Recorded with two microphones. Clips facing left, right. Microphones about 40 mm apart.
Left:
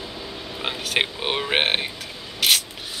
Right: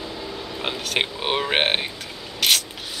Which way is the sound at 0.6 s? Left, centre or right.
Centre.